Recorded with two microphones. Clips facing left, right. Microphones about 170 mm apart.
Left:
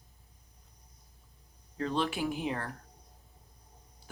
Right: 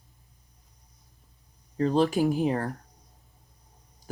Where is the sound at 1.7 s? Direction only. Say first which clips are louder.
Right 9 dB; 40° right (ahead or behind).